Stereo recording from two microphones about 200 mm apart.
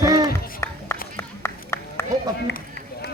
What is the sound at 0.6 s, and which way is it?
Run, 15° left (ahead or behind).